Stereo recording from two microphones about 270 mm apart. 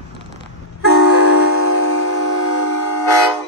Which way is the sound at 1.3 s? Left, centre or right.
Left.